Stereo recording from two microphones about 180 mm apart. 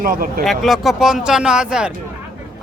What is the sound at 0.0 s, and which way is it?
Speech, 55° right (ahead or behind).